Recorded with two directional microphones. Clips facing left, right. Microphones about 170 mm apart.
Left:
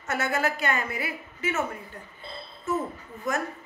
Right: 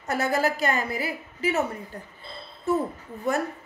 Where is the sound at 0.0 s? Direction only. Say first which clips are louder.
Right 3 dB; 35° right (ahead or behind).